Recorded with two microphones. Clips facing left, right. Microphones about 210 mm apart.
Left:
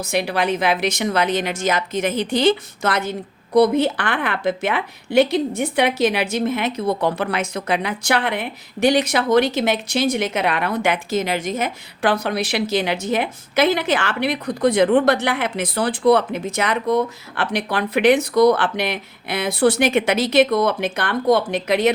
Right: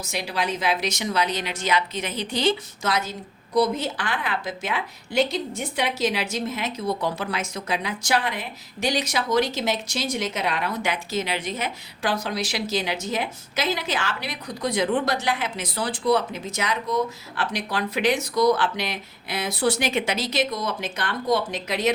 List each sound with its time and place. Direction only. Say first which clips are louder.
0.0 s a woman's voice: left 7 dB; 60° left (ahead or behind)